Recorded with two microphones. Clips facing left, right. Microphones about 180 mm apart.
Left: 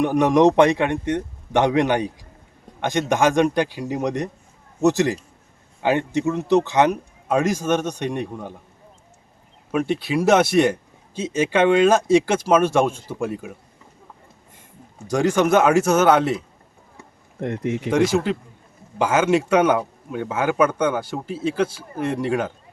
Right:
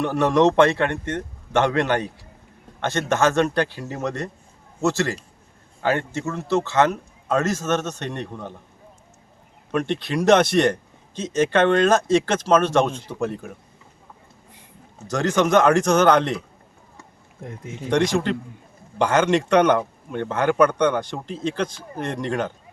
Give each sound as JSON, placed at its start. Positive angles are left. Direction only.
{"t": 0.0, "sound": "speech", "side_deg": 15}
{"t": 9.7, "sound": "speech", "side_deg": 5}
{"t": 14.9, "sound": "speech", "side_deg": 10}
{"t": 17.4, "sound": "speech", "side_deg": 75}
{"t": 17.9, "sound": "speech", "side_deg": 5}